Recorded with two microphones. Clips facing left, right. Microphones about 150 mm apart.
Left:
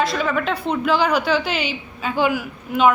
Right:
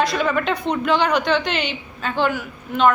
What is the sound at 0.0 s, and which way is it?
A woman's voice, centre (ahead or behind).